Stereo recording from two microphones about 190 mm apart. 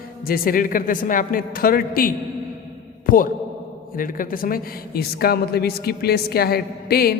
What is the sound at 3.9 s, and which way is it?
A woman's voice, 45° left (ahead or behind).